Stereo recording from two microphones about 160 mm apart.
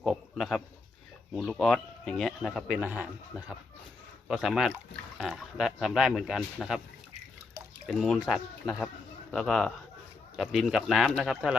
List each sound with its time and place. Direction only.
0.0 s a sound: centre (ahead or behind)
1.4 s speech: centre (ahead or behind)
7.9 s speech: centre (ahead or behind)